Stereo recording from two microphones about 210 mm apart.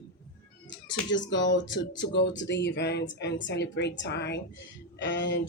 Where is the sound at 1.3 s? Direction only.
60° left (ahead or behind).